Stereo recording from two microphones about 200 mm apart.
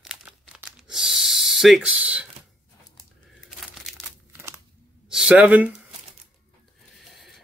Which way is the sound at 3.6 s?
Centre (ahead or behind).